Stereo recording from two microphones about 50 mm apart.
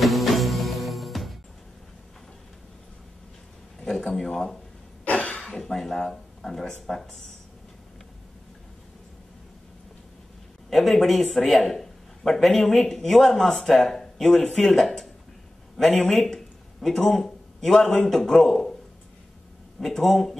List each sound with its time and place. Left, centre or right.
0.0 s music: centre
3.8 s a sound: centre
5.0 s cough: left
5.3 s speech: centre
10.7 s a man's voice: centre
16.1 s a sound: centre
18.0 s a man's voice: centre
19.8 s a man's voice: centre